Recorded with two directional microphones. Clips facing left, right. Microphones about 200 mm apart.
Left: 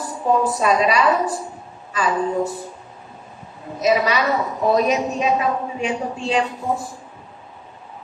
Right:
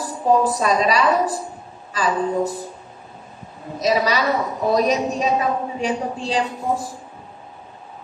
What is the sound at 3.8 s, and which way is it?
A woman's voice, 35° right (ahead or behind).